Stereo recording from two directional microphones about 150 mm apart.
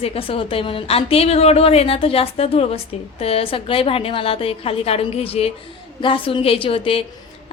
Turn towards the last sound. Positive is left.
turn(degrees=40)  # may be behind; listen again after turning